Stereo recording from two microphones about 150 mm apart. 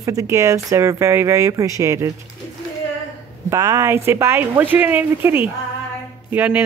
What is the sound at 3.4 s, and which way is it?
Speech, 20° right (ahead or behind).